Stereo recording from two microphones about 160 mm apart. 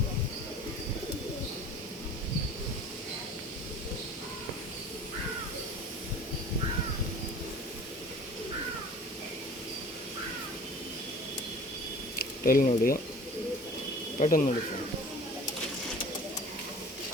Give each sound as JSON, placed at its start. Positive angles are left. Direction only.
{"t": 12.5, "sound": "speech", "side_deg": 65}
{"t": 14.2, "sound": "speech", "side_deg": 55}